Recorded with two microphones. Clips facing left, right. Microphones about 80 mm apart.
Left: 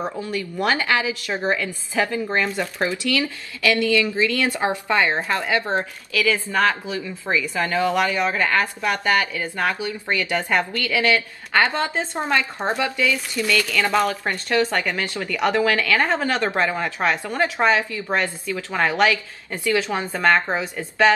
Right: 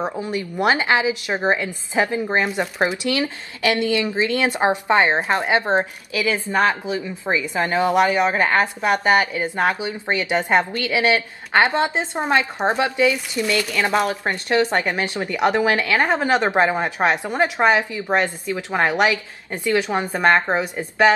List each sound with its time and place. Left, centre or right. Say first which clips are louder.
0.0 s a woman's voice: right 2 dB; right